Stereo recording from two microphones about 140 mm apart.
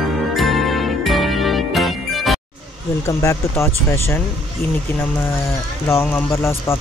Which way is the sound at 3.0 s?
20° left (ahead or behind).